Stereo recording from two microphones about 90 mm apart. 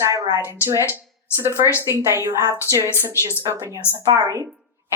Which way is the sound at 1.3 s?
25° right (ahead or behind).